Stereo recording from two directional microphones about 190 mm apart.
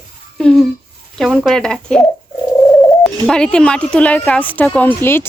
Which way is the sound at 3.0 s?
5° left (ahead or behind).